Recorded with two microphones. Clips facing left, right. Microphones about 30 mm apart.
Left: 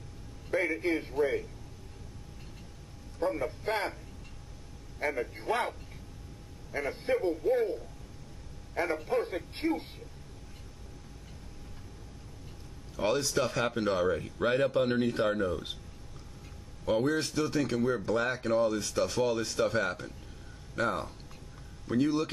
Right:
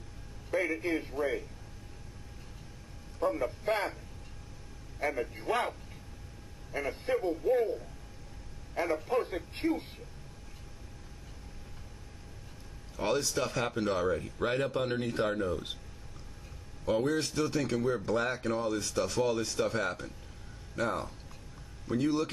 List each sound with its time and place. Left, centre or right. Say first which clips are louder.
0.5 s speech: left 2 dB; centre
3.3 s speech: right 1 dB; centre
4.9 s speech: left 1 dB; centre
6.8 s speech: left 2 dB; centre
9.0 s speech: even; centre
12.9 s speech: left 2 dB; centre
16.8 s speech: left 1 dB; centre